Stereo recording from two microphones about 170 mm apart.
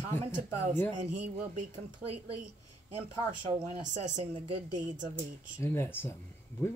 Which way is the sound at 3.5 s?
40° right (ahead or behind).